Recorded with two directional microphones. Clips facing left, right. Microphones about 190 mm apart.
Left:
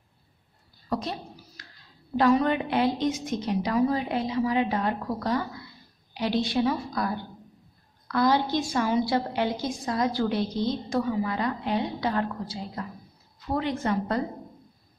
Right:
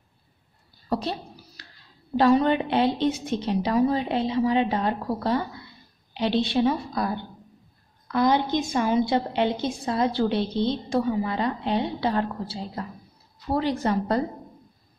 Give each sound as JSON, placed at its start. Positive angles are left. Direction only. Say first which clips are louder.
{"t": 0.8, "sound": "a woman's voice", "louder": "right 3 dB", "side_deg": -30}
{"t": 2.1, "sound": "a woman's voice", "louder": "right 2 dB", "side_deg": -30}